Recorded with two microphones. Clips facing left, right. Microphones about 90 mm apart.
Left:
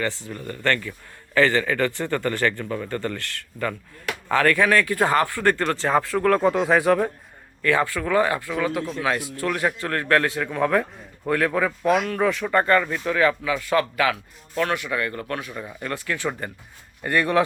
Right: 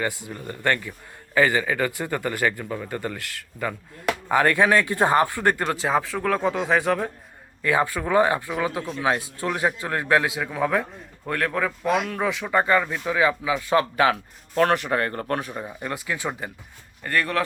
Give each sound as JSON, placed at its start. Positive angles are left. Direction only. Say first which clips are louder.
{"t": 0.0, "sound": "speech", "louder": "left 1 dB", "side_deg": -15}
{"t": 7.6, "sound": "speech", "louder": "left 1 dB", "side_deg": -15}
{"t": 15.8, "sound": "speech", "louder": "left 3 dB", "side_deg": -15}
{"t": 17.0, "sound": "speech", "louder": "left 4 dB", "side_deg": 15}